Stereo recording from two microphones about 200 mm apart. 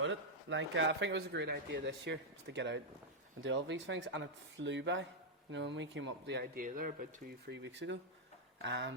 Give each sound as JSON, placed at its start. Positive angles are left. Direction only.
{"t": 0.0, "sound": "speech", "side_deg": -70}